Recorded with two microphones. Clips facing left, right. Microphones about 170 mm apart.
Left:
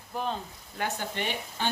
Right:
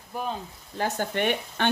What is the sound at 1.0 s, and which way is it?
Speech, 60° right (ahead or behind).